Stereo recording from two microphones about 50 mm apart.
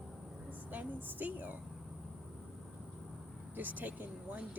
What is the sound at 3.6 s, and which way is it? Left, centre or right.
Speech, right.